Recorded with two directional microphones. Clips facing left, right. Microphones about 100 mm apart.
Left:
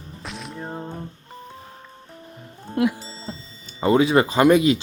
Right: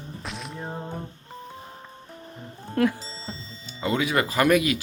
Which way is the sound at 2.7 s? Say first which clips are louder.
Left 1 dB; 10° left (ahead or behind).